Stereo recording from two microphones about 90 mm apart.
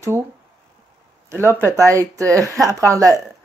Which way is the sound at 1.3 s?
30° right (ahead or behind).